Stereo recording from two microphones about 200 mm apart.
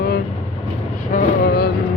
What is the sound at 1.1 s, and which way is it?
Vehicle, 50° left (ahead or behind).